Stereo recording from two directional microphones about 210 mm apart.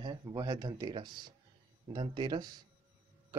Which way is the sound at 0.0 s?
20° right (ahead or behind).